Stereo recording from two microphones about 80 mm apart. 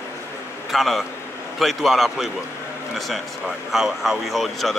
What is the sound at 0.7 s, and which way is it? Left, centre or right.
A man's voice, centre.